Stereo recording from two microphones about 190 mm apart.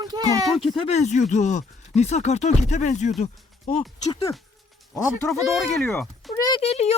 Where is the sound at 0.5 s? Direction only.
Centre (ahead or behind).